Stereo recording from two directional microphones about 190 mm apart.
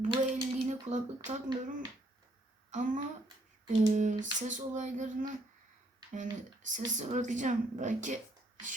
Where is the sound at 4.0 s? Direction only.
40° right (ahead or behind).